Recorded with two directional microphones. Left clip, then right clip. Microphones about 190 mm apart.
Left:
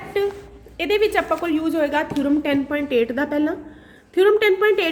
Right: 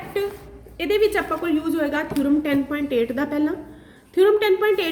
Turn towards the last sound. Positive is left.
turn(degrees=30)  # may be behind; listen again after turning